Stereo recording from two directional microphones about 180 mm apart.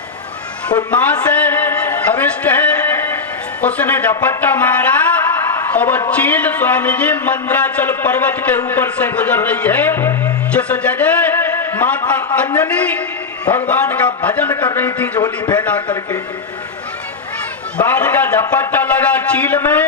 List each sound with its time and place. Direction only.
0.9 s music: 5° left (ahead or behind)
3.6 s a man's voice: 10° left (ahead or behind)
5.5 s a sound: 10° left (ahead or behind)
6.1 s a man's voice: 10° left (ahead or behind)
15.2 s a man's voice: 25° left (ahead or behind)
17.8 s a man's voice: 10° left (ahead or behind)